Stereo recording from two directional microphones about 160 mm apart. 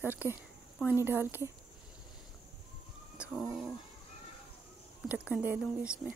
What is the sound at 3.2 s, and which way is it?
Cat, 5° right (ahead or behind).